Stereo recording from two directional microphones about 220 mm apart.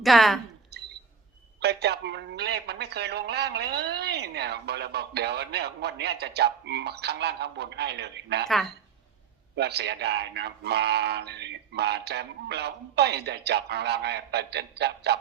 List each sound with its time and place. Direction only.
0.0 s a woman's voice: centre (ahead or behind)
1.6 s a man's voice: 50° right (ahead or behind)
8.4 s a woman's voice: centre (ahead or behind)
9.6 s a man's voice: 50° right (ahead or behind)